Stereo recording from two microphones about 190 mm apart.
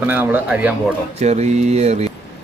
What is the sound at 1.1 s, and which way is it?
Speech, 35° right (ahead or behind).